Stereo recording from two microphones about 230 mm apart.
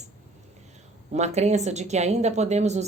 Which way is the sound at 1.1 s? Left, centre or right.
Right.